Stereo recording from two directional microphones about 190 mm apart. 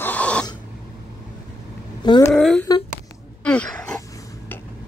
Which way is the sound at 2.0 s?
25° left (ahead or behind).